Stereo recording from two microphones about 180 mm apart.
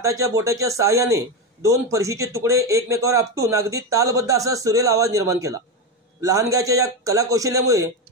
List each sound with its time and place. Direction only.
0.0 s a man's voice: 15° right (ahead or behind)